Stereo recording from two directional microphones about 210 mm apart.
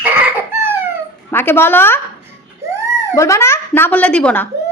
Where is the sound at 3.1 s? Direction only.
15° left (ahead or behind).